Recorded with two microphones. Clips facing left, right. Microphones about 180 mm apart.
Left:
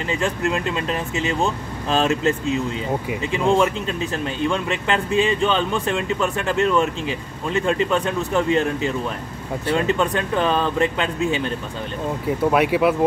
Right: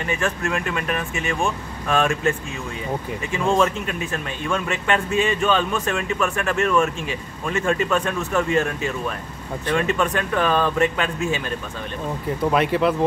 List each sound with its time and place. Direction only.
0.0 s speech: 20° left (ahead or behind)
12.3 s speech: 5° left (ahead or behind)